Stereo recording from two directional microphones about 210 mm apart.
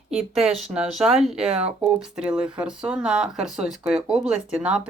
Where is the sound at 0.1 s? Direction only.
Centre (ahead or behind).